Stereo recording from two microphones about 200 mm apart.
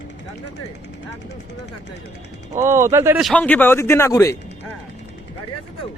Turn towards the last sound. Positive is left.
turn(degrees=15)  # may be behind; listen again after turning